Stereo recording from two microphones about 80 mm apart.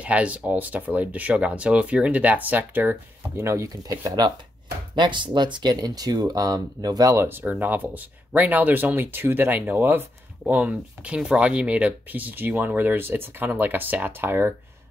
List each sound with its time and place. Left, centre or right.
0.0 s speech: centre; by 3.7 s right
3.8 s speech: right
4.9 s speech: right
7.2 s speech: right